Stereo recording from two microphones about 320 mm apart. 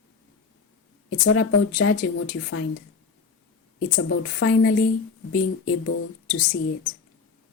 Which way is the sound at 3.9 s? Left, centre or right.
Left.